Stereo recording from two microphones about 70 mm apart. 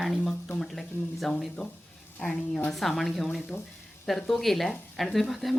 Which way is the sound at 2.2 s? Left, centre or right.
Centre.